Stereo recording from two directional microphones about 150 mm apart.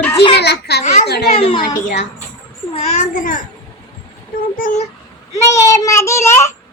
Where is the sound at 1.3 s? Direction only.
35° left (ahead or behind).